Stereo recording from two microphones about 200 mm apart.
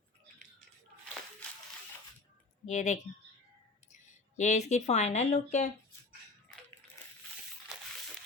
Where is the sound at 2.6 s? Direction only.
35° left (ahead or behind).